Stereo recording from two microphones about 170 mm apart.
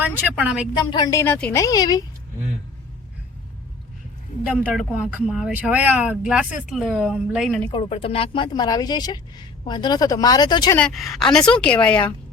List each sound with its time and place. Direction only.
0.0 s a woman's voice: 5° right (ahead or behind)
0.8 s speech: 25° left (ahead or behind)
4.6 s speech: 5° right (ahead or behind)
7.7 s speech: 30° left (ahead or behind)
10.8 s speech: centre (ahead or behind)